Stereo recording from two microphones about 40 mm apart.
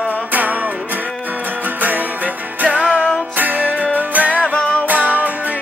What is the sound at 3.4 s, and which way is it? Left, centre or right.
Music, right.